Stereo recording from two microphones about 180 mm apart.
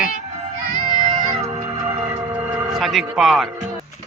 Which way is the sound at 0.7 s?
25° left (ahead or behind).